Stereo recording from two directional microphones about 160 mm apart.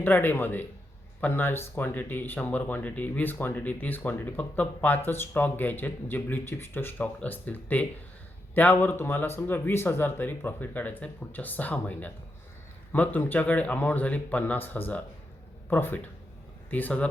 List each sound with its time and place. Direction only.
0.0 s speech: 10° left (ahead or behind)